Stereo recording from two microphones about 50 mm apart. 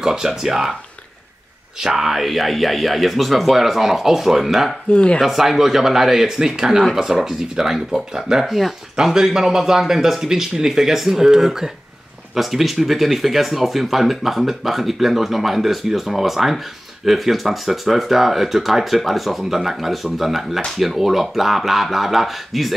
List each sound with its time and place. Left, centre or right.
0.0 s speech: centre
1.8 s speech: centre
4.8 s speech: left
5.2 s speech: centre